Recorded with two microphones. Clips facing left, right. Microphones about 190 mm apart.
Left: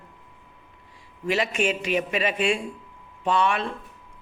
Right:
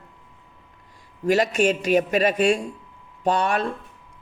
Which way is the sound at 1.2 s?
40° right (ahead or behind).